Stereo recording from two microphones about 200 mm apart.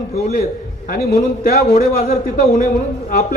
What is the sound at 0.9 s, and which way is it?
A man's voice, 50° left (ahead or behind).